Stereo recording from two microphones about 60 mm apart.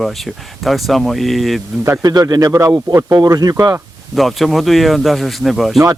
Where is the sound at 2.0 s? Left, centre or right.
Right.